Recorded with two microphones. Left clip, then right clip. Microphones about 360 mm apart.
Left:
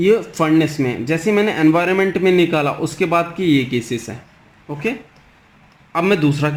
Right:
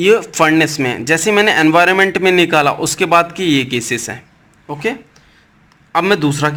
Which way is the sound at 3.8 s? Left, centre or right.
Right.